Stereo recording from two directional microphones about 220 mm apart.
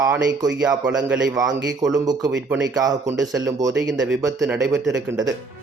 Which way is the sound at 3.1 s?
Centre (ahead or behind).